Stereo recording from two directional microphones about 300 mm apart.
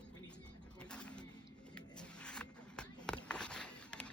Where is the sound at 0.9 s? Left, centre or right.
Centre.